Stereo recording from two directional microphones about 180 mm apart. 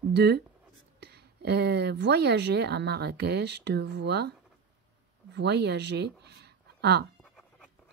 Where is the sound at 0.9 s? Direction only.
65° right (ahead or behind).